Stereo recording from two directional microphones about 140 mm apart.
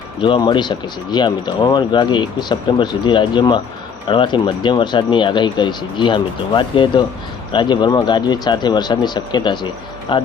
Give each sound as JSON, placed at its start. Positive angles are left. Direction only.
{"t": 0.2, "sound": "speech", "side_deg": 35}